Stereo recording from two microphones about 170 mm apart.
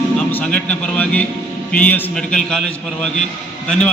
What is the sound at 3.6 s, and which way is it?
Speech, 5° left (ahead or behind).